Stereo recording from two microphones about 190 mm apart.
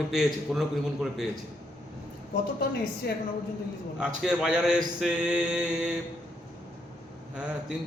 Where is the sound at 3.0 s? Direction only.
55° left (ahead or behind).